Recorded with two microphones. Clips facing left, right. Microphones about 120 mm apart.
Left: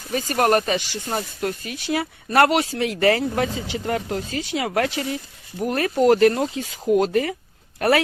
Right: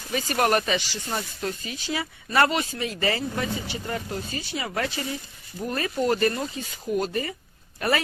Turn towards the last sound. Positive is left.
turn(degrees=70)  # may be behind; listen again after turning